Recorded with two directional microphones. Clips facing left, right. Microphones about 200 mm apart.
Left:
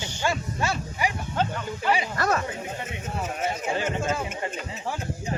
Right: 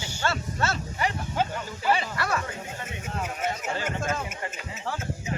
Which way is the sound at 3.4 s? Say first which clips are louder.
Left 3 dB; 10° left (ahead or behind).